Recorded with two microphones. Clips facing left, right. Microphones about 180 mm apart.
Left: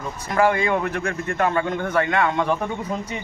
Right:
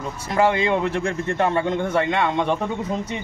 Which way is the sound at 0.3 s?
25° right (ahead or behind).